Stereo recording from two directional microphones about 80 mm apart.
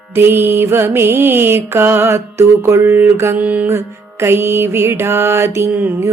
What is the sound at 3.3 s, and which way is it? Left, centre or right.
Music, centre.